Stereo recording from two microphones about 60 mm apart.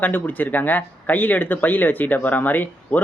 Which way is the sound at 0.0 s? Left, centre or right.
Left.